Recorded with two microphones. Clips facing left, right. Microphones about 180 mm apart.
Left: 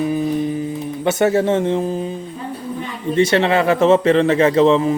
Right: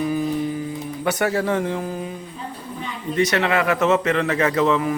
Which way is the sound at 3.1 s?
30° left (ahead or behind).